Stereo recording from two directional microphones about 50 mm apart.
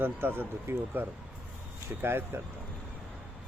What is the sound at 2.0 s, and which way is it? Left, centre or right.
Speech, right.